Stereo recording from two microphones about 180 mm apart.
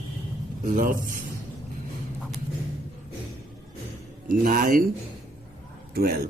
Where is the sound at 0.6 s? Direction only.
50° right (ahead or behind).